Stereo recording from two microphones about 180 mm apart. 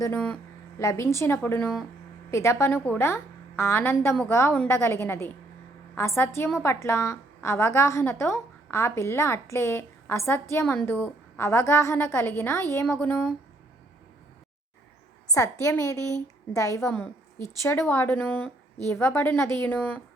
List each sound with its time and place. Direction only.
0.0 s a woman's voice: 10° left (ahead or behind)
15.3 s a woman's voice: 15° left (ahead or behind)